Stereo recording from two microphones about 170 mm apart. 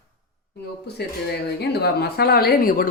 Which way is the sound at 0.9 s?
75° left (ahead or behind).